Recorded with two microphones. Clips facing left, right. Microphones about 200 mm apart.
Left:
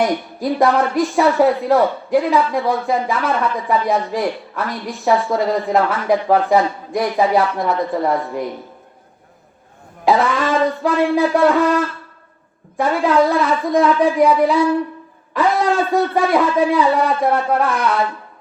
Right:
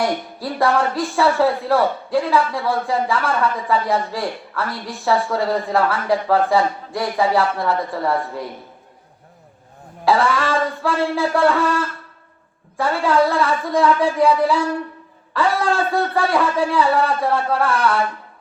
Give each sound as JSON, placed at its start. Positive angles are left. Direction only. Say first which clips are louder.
{"t": 0.0, "sound": "speech", "louder": "left 4 dB", "side_deg": 15}
{"t": 10.1, "sound": "speech", "louder": "left 2 dB", "side_deg": 20}
{"t": 12.7, "sound": "speech", "louder": "left 3 dB", "side_deg": 15}